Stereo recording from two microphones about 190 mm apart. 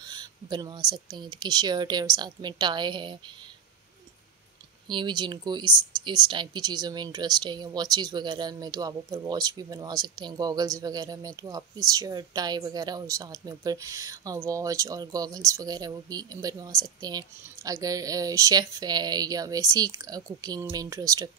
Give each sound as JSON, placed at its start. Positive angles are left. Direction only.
{"t": 0.0, "sound": "speech", "side_deg": -20}
{"t": 4.8, "sound": "speech", "side_deg": -25}